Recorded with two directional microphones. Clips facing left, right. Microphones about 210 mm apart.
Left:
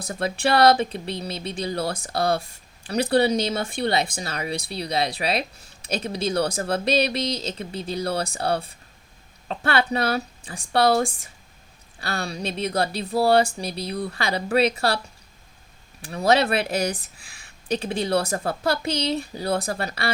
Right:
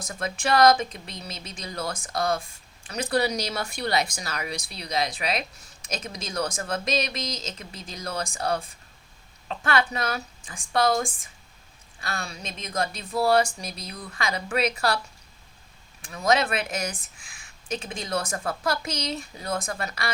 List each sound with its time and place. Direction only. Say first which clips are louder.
0.1 s speech: left 3 dB; 35° left (ahead or behind)
16.0 s speech: left 4 dB; 35° left (ahead or behind)